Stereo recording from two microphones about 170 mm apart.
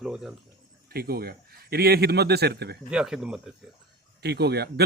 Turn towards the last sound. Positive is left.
turn(degrees=-75)  # may be behind; listen again after turning